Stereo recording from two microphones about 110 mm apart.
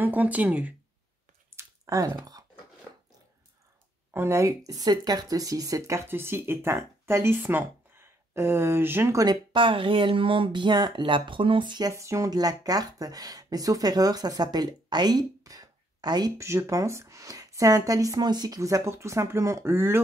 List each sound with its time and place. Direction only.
0.0 s speech: 15° right (ahead or behind)
1.6 s a sound: 30° right (ahead or behind)
4.1 s speech: 25° right (ahead or behind)
9.2 s speech: 45° right (ahead or behind)
11.9 s speech: 25° right (ahead or behind)
16.3 s speech: 25° right (ahead or behind)